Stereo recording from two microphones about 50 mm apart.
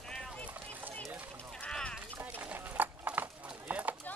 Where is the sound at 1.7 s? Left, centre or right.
Left.